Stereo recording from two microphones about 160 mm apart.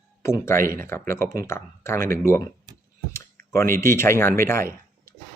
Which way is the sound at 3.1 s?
15° left (ahead or behind).